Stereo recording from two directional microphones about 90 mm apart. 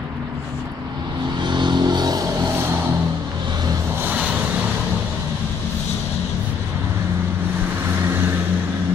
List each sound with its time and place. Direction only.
1.4 s vehicle: 55° right (ahead or behind)
4.0 s vehicle: 20° right (ahead or behind)